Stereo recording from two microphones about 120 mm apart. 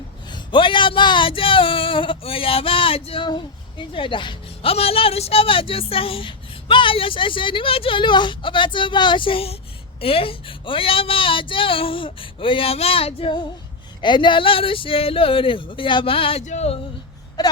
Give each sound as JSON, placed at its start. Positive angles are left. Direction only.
{"t": 0.3, "sound": "speech", "side_deg": 40}
{"t": 16.5, "sound": "speech", "side_deg": 60}
{"t": 17.4, "sound": "wail", "side_deg": 35}